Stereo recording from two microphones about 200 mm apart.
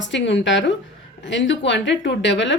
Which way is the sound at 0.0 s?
65° left (ahead or behind).